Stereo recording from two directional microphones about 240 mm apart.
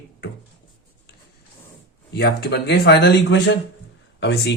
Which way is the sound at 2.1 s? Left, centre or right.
Left.